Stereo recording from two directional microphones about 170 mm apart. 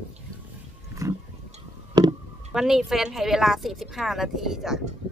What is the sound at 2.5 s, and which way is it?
A woman's voice, centre (ahead or behind).